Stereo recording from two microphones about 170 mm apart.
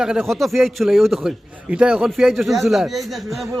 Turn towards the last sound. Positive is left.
turn(degrees=0)  # may be behind; listen again after turning